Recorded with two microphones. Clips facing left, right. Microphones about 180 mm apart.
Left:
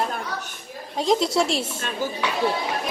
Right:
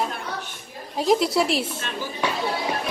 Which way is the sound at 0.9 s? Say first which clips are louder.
Right 1 dB; 5° right (ahead or behind).